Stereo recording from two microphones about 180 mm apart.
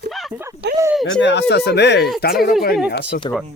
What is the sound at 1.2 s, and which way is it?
Speech, 75° left (ahead or behind).